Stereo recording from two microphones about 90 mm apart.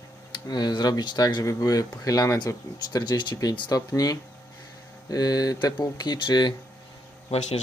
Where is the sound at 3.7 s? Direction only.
40° left (ahead or behind).